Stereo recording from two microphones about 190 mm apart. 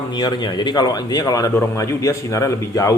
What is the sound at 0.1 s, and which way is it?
A man's voice, 20° left (ahead or behind).